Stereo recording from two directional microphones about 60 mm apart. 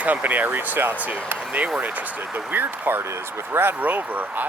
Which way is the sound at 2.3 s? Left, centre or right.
Right.